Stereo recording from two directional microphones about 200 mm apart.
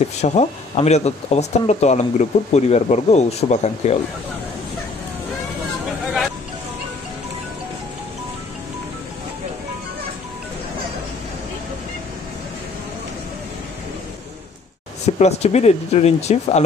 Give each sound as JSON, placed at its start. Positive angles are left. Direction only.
{"t": 0.2, "sound": "speech", "side_deg": 35}
{"t": 15.1, "sound": "speech", "side_deg": 30}